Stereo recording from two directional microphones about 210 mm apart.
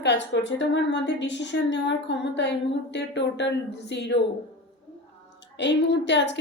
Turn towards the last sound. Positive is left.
turn(degrees=55)  # may be behind; listen again after turning